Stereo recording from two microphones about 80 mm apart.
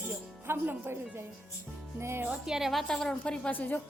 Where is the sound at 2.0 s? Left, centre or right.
Right.